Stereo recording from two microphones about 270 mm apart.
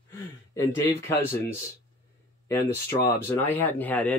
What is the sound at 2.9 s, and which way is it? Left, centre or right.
Speech, left.